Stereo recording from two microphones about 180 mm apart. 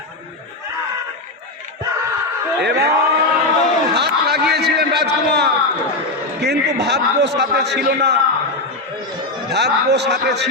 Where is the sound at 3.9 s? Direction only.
65° right (ahead or behind).